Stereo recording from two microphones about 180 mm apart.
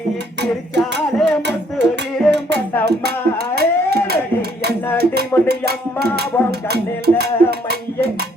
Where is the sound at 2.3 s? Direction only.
70° right (ahead or behind).